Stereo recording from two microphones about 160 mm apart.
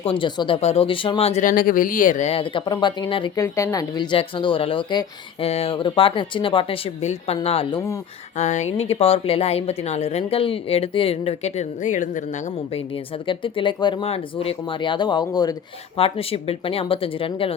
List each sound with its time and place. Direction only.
0.0 s speech: 35° left (ahead or behind)
1.5 s speech: 60° left (ahead or behind)
2.3 s speech: 30° left (ahead or behind)
3.3 s speech: 20° left (ahead or behind); by 12.8 s 50° left (ahead or behind)
13.2 s speech: 30° left (ahead or behind)
16.0 s speech: 35° left (ahead or behind)